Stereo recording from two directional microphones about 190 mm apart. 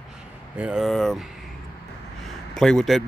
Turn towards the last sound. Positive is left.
turn(degrees=0)  # may be behind; listen again after turning